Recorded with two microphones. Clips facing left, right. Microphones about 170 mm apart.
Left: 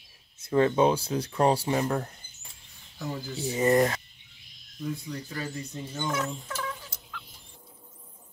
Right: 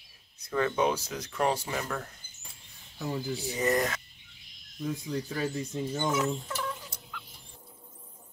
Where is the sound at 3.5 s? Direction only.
30° left (ahead or behind).